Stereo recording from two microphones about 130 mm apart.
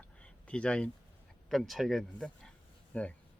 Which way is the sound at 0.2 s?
10° left (ahead or behind).